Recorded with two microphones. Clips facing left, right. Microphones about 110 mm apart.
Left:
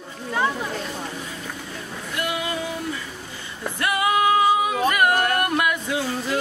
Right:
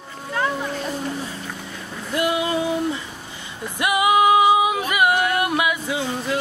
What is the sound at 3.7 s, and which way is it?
Music, 15° right (ahead or behind).